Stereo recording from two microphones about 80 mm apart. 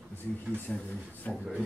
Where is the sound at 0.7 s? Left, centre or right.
Centre.